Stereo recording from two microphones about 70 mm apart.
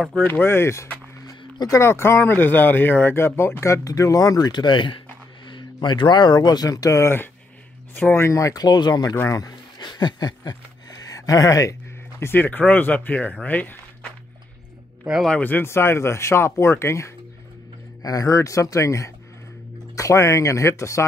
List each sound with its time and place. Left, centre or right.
0.2 s speech: left
7.0 s speech: left
8.6 s speech: left
9.3 s a sound: left
12.2 s speech: left
15.4 s speech: left
18.0 s speech: left